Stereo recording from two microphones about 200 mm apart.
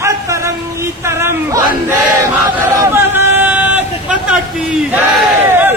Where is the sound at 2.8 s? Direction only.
10° right (ahead or behind).